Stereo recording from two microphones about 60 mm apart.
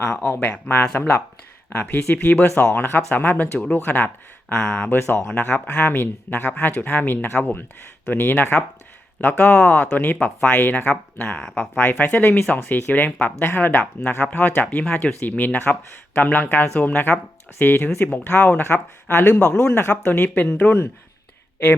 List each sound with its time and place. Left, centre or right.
0.2 s speech: left
1.8 s speech: left
4.5 s speech: centre
4.8 s speech: left; by 5.9 s centre
5.9 s speech: left
9.4 s speech: left
11.2 s speech: centre
11.9 s speech: left
13.4 s speech: left